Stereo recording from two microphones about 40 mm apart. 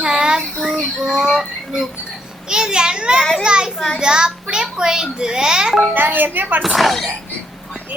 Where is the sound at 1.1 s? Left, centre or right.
Right.